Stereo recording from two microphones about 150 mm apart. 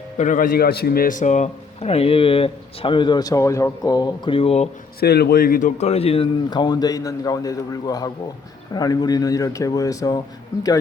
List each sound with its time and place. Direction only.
0.2 s a man's voice: 60° left (ahead or behind); by 4.7 s 45° left (ahead or behind)
4.9 s a man's voice: 90° left; by 6.2 s 40° left (ahead or behind)
6.5 s a man's voice: 30° left (ahead or behind)